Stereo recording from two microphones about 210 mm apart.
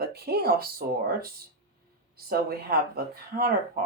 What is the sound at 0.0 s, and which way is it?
Speech, 45° right (ahead or behind).